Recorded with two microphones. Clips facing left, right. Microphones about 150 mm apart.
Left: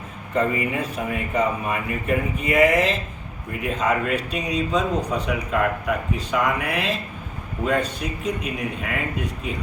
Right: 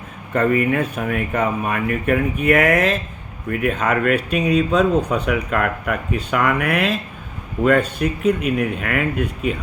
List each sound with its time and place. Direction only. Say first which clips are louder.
0.3 s speech: right 5 dB; 60° right (ahead or behind)